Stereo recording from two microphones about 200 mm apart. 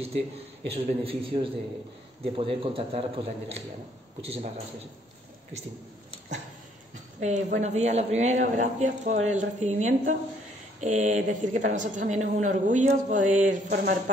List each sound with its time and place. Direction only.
0.7 s a man's voice: 30° right (ahead or behind)
7.2 s a woman's voice: 35° right (ahead or behind)